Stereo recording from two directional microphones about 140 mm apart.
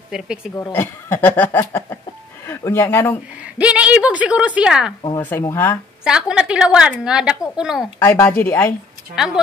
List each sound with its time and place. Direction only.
0.1 s a woman's voice: 5° right (ahead or behind)
0.6 s speech: 15° left (ahead or behind)
3.4 s a woman's voice: 10° right (ahead or behind)
5.1 s speech: 15° left (ahead or behind)
6.0 s a woman's voice: 5° right (ahead or behind)
8.0 s speech: 15° left (ahead or behind)
9.1 s a woman's voice: 5° right (ahead or behind)